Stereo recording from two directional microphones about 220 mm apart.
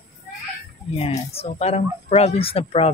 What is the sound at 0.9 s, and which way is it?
Speech, 25° left (ahead or behind).